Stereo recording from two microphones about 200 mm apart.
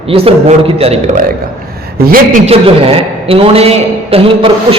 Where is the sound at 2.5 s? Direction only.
30° right (ahead or behind).